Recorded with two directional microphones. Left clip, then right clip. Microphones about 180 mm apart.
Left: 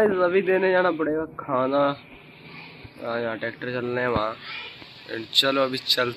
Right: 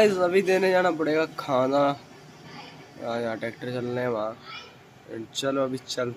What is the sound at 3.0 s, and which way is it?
Speech, 15° right (ahead or behind).